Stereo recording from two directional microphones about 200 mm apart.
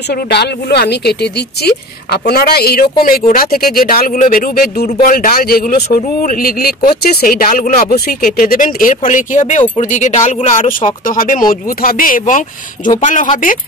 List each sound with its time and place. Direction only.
0.1 s speech: 55° left (ahead or behind)